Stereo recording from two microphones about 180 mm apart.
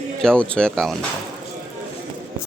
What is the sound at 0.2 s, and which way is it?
Speech, 5° left (ahead or behind).